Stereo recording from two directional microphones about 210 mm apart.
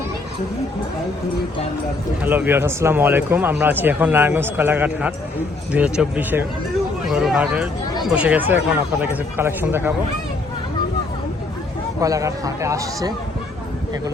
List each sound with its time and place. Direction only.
2.2 s speech: 10° right (ahead or behind)
11.9 s speech: 15° right (ahead or behind)